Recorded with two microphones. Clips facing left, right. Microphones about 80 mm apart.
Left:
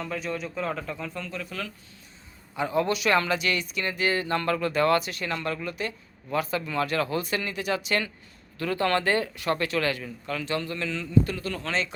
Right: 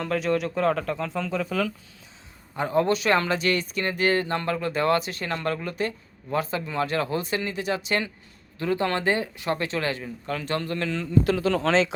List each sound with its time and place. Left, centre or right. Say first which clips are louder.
0.0 s speech: right 7 dB; right
2.6 s speech: right 3 dB; right
4.4 s speech: left 1 dB; right
11.2 s speech: right 10 dB; right